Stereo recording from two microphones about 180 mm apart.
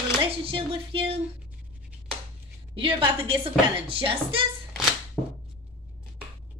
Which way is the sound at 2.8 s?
30° right (ahead or behind).